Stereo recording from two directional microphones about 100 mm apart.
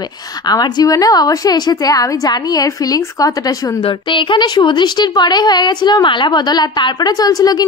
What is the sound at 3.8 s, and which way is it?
A woman's voice, 55° left (ahead or behind).